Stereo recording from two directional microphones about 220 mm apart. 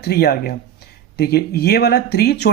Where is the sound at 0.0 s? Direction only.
45° left (ahead or behind).